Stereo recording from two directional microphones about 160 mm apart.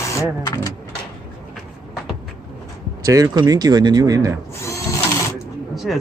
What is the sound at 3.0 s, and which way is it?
Speech, 20° right (ahead or behind).